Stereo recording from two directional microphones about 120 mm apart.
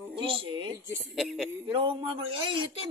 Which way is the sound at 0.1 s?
50° right (ahead or behind).